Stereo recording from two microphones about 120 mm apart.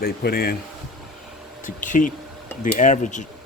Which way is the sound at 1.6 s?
90° left.